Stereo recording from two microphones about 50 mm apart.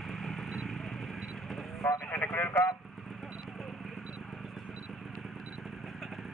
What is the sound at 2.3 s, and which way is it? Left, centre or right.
Speech, left.